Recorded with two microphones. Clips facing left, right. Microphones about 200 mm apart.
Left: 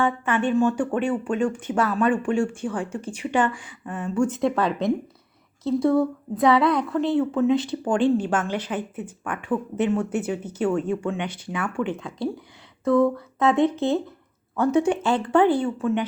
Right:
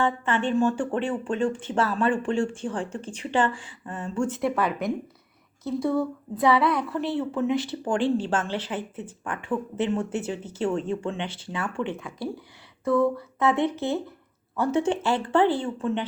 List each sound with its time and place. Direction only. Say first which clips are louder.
0.0 s a woman's voice: left 2 dB; 10° left (ahead or behind)